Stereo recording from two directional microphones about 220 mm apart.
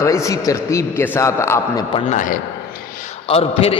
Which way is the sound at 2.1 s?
35° left (ahead or behind).